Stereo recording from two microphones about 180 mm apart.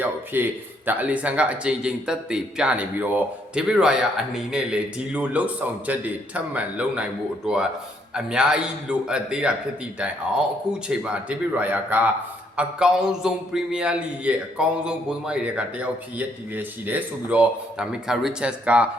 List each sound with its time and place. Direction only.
0.3 s a man's voice: 10° right (ahead or behind)
10.8 s a man's voice: 5° right (ahead or behind)